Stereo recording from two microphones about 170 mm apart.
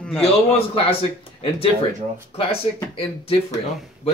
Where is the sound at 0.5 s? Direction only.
35° left (ahead or behind).